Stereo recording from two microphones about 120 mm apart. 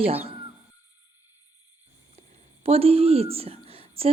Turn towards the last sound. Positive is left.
turn(degrees=-55)  # may be behind; listen again after turning